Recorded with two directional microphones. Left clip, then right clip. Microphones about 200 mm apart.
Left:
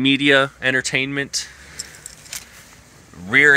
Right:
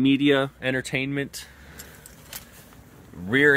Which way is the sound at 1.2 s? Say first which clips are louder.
Left 12 dB; 20° right (ahead or behind).